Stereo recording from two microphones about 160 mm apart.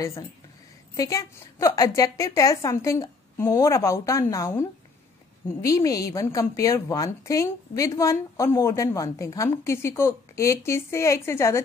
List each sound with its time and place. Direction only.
0.9 s a woman's voice: 20° left (ahead or behind)